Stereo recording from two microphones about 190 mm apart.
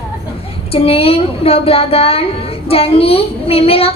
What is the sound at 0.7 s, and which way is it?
A child's voice, 30° left (ahead or behind).